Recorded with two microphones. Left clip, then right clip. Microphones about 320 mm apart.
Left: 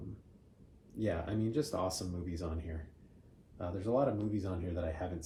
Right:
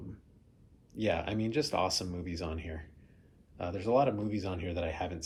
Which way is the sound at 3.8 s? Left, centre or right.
Centre.